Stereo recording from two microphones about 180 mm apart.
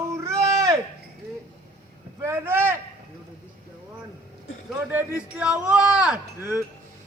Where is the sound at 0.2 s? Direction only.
15° right (ahead or behind).